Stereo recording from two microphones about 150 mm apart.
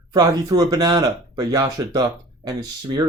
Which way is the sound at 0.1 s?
25° right (ahead or behind).